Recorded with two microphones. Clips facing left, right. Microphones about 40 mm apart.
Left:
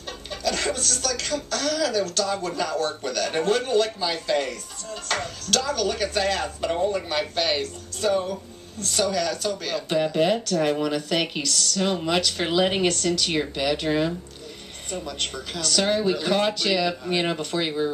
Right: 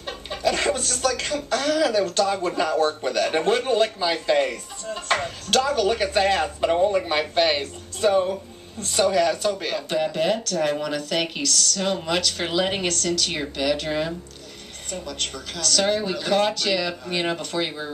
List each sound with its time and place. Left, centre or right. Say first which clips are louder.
0.0 s speech: right 4 dB; centre
9.8 s speech: left 2 dB; centre